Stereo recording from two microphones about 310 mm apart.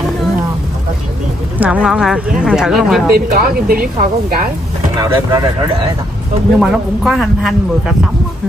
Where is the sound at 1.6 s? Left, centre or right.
Centre.